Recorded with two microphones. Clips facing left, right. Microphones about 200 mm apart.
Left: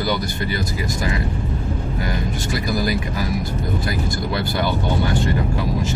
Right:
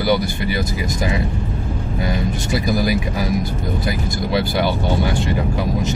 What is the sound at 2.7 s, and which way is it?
Speech, 15° right (ahead or behind).